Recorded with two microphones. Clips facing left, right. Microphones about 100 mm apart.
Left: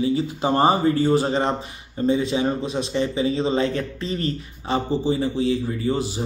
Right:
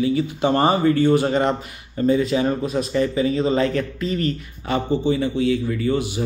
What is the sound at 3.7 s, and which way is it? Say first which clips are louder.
Mantra: right 3 dB; 30° left (ahead or behind).